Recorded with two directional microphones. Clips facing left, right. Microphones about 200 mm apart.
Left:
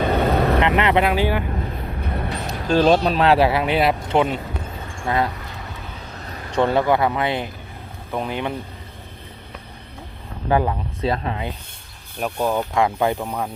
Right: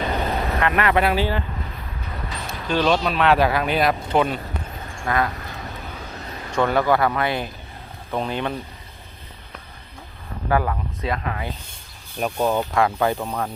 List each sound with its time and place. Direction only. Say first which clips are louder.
0.3 s vehicle: left 7 dB; 60° left (ahead or behind)
0.6 s speech: left 2 dB; 20° left (ahead or behind)
2.0 s vehicle: left 5 dB; 60° left (ahead or behind)
2.5 s speech: left 4 dB; 40° left (ahead or behind); by 4.4 s 25° left (ahead or behind)
4.9 s a sound: left 1 dB; 30° left (ahead or behind)
6.5 s speech: left 1 dB; 30° left (ahead or behind); by 8.5 s 15° left (ahead or behind)
10.5 s speech: left 2 dB; 25° left (ahead or behind)
12.2 s speech: right 1 dB; centre (ahead or behind)
12.7 s speech: left 1 dB; 20° left (ahead or behind)
13.1 s speech: even; 10° left (ahead or behind)